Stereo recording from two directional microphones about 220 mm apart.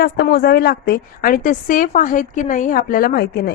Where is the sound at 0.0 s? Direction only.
45° left (ahead or behind).